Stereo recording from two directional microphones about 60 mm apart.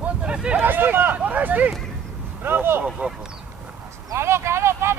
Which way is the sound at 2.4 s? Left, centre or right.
Right.